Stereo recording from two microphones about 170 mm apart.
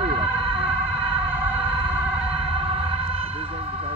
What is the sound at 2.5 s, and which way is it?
Music, 35° right (ahead or behind).